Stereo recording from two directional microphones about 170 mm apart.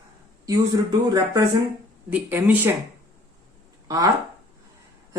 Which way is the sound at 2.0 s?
10° right (ahead or behind).